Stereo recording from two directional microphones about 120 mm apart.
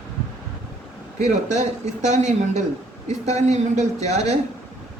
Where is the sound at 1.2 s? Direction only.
75° right (ahead or behind).